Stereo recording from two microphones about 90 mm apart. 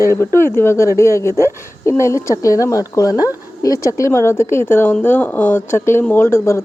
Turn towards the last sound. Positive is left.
turn(degrees=30)  # may be behind; listen again after turning